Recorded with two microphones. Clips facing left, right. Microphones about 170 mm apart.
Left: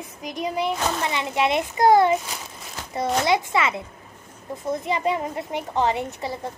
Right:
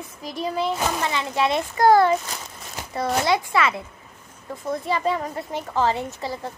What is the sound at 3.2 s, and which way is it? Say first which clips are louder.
Speech: right 1 dB; 20° left (ahead or behind).